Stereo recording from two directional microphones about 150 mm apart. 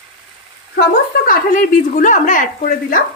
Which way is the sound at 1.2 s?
65° left (ahead or behind).